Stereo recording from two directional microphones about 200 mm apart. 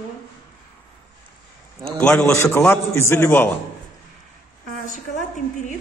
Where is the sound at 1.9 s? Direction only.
5° left (ahead or behind).